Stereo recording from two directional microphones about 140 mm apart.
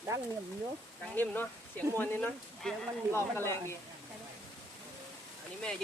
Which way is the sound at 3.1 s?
20° left (ahead or behind).